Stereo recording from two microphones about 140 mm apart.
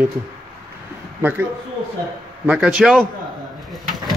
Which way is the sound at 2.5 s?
5° right (ahead or behind).